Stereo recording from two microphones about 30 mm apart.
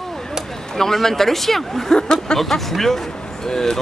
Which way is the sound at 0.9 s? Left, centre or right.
Centre.